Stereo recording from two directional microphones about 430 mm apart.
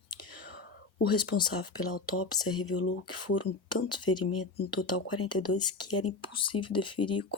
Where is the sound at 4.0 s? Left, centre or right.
Centre.